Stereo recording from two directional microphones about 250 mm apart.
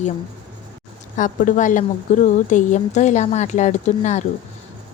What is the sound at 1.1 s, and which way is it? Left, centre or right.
Speech, left.